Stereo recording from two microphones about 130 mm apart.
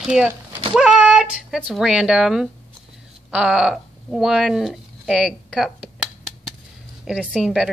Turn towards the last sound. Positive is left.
turn(degrees=-5)  # may be behind; listen again after turning